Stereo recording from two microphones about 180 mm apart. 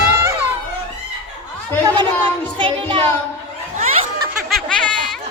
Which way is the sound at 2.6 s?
30° right (ahead or behind).